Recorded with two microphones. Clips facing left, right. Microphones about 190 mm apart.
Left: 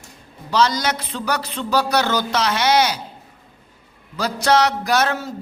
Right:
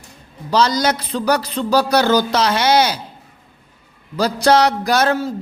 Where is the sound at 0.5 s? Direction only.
35° right (ahead or behind).